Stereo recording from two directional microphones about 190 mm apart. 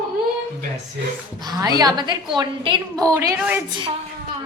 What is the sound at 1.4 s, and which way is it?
A woman's voice, 20° right (ahead or behind).